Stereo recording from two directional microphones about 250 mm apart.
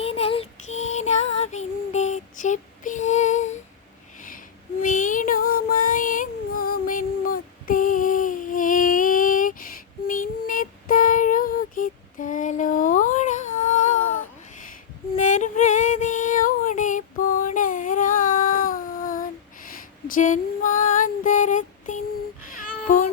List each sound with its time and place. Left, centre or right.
0.0 s child singing: left
4.8 s child singing: left
15.1 s female singing: left
22.4 s babbling: left